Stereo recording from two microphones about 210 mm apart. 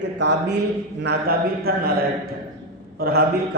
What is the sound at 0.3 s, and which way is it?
A man's voice, 55° right (ahead or behind).